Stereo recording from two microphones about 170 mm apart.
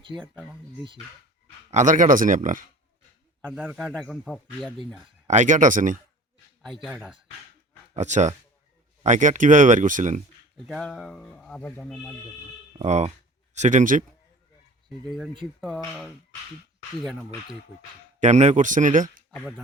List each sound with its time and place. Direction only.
1.7 s speech: 50° right (ahead or behind)
3.6 s speech: 5° right (ahead or behind)
5.3 s speech: 45° right (ahead or behind)
7.9 s speech: 45° right (ahead or behind)
10.7 s speech: centre (ahead or behind)
12.8 s speech: 40° right (ahead or behind)
15.6 s speech: 5° left (ahead or behind)
18.2 s speech: 45° right (ahead or behind)